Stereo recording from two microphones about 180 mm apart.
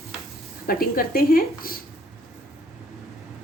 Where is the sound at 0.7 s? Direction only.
55° left (ahead or behind).